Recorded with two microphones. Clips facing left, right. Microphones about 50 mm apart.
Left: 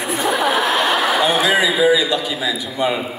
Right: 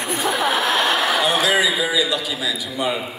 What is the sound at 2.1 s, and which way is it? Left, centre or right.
A woman's voice, centre.